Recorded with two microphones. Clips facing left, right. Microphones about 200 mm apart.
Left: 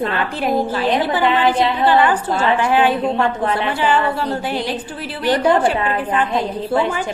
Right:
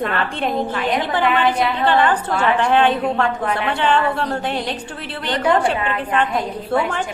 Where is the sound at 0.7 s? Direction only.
30° left (ahead or behind).